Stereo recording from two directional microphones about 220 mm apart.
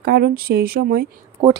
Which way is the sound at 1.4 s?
25° right (ahead or behind).